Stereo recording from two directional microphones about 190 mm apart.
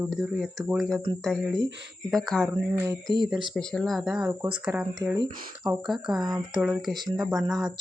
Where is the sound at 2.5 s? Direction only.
15° right (ahead or behind).